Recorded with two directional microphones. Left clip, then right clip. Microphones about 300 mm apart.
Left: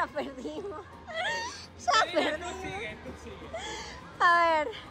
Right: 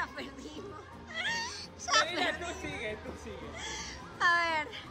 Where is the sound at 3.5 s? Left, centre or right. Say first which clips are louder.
Left 4 dB; centre.